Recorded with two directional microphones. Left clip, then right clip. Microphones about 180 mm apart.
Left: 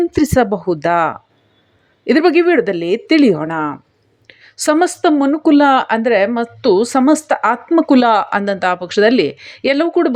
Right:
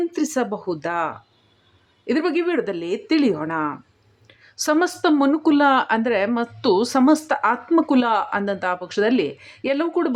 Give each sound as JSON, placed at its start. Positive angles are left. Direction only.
{"t": 0.1, "sound": "a woman's voice", "side_deg": 30}